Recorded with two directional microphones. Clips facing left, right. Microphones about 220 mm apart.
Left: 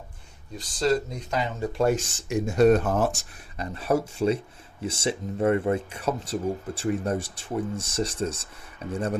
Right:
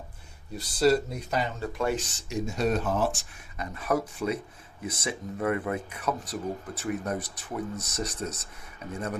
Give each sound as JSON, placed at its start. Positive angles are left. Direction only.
{"t": 0.5, "sound": "speech", "side_deg": -10}
{"t": 1.8, "sound": "speech", "side_deg": 45}
{"t": 3.6, "sound": "speech", "side_deg": 30}